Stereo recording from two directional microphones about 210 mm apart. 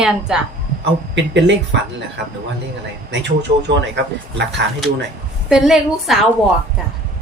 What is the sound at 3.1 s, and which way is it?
Speech, 55° right (ahead or behind).